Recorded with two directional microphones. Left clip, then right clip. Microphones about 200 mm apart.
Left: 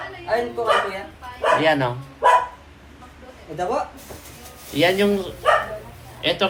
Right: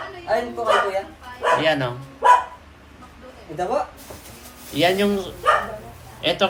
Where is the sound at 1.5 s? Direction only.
5° right (ahead or behind).